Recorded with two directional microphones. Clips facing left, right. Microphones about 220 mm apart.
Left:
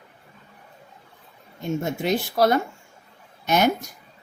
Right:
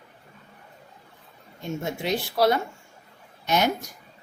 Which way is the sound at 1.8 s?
50° left (ahead or behind).